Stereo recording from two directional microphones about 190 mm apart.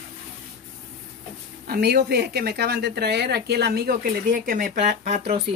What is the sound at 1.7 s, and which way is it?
Speech, 60° right (ahead or behind).